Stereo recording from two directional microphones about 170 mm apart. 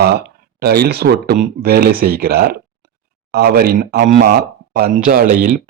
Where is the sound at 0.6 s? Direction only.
70° right (ahead or behind).